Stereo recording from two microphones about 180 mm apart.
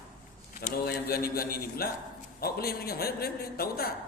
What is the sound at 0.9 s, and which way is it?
A man's voice, 60° left (ahead or behind).